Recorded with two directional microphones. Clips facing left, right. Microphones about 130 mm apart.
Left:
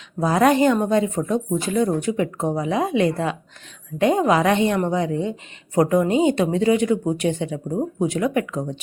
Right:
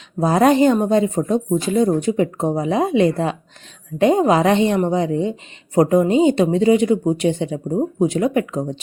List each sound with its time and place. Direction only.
0.2 s speech: 30° right (ahead or behind)